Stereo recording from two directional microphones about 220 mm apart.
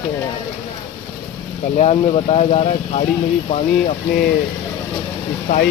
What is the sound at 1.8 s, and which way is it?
Speech, 30° left (ahead or behind).